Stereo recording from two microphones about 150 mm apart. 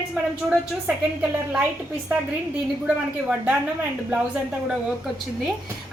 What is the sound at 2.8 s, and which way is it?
Speech, 10° right (ahead or behind).